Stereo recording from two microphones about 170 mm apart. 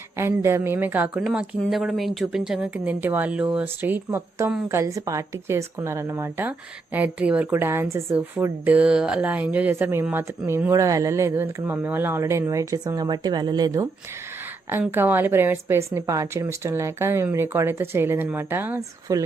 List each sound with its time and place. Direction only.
0.2 s speech: 15° right (ahead or behind)
14.7 s speech: 10° right (ahead or behind)